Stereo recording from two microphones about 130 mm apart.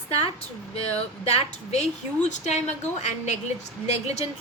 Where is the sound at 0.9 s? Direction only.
55° left (ahead or behind).